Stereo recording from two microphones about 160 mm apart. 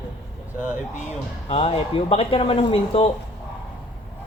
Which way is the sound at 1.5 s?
35° left (ahead or behind).